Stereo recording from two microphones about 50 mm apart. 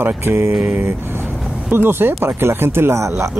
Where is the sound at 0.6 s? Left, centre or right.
Right.